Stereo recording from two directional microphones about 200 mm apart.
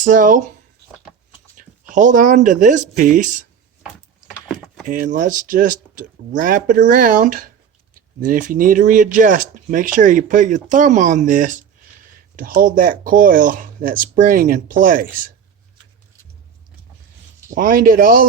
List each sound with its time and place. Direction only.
0.0 s speech: 40° right (ahead or behind)
1.5 s speech: 40° right (ahead or behind)
4.9 s speech: 40° right (ahead or behind)
17.5 s speech: 45° right (ahead or behind)